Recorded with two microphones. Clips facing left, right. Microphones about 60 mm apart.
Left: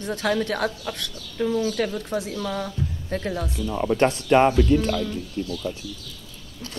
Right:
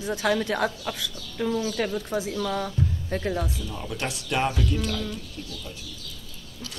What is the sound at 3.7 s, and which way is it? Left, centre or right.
Speech, left.